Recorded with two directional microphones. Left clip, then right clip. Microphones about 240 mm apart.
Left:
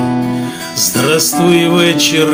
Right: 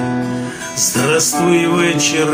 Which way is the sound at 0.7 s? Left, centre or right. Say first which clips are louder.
Left 2 dB; left.